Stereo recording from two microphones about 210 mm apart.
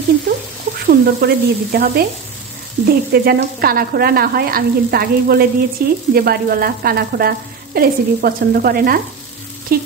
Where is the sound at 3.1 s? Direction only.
45° right (ahead or behind).